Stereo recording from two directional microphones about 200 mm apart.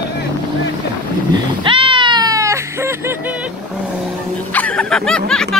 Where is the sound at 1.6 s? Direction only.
25° right (ahead or behind).